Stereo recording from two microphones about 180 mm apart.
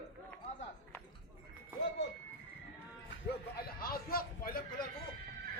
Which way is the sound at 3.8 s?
55° left (ahead or behind).